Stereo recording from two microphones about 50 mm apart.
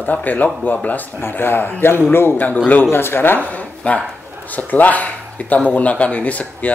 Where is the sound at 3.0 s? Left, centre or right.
Left.